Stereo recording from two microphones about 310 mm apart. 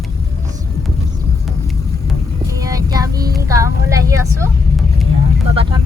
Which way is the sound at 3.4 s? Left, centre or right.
Centre.